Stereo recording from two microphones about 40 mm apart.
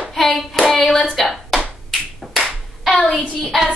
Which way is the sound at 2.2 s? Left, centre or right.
Centre.